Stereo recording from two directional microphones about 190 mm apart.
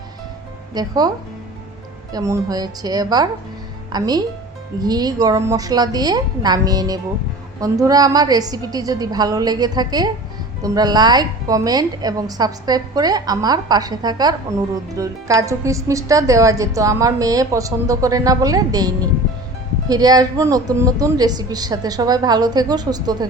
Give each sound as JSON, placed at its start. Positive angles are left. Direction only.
{"t": 0.7, "sound": "a woman's voice", "side_deg": -20}
{"t": 2.1, "sound": "a woman's voice", "side_deg": -15}